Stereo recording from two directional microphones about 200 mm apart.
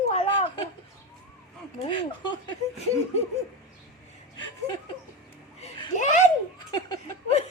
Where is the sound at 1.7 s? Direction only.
25° left (ahead or behind).